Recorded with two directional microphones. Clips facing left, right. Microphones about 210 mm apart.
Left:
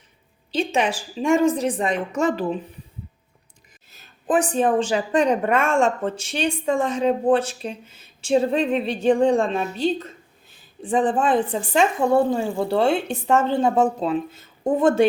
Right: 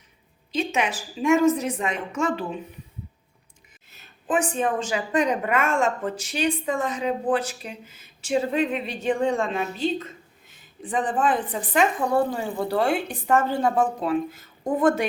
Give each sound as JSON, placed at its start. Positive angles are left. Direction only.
{"t": 0.5, "sound": "speech", "side_deg": 30}
{"t": 4.3, "sound": "a woman's voice", "side_deg": 35}